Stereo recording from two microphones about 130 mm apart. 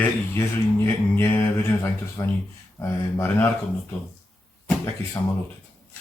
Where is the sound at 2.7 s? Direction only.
20° left (ahead or behind).